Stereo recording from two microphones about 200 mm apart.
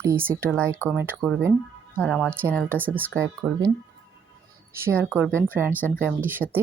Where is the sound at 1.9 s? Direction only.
5° left (ahead or behind).